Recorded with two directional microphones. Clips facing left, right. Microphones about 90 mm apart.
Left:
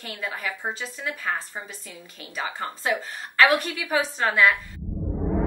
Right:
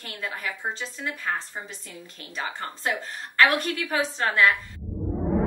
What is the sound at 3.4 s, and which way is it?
A woman's voice, 5° left (ahead or behind).